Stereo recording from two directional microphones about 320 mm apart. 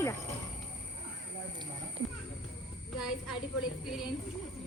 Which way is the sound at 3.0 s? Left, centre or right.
Centre.